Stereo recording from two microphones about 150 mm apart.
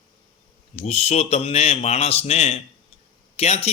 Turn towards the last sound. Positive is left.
turn(degrees=45)  # may be behind; listen again after turning